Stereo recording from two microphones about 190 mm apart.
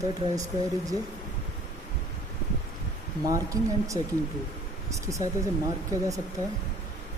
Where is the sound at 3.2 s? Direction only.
15° right (ahead or behind).